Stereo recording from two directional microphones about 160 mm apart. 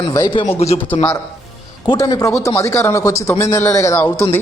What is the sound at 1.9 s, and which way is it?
A man's voice, 25° left (ahead or behind).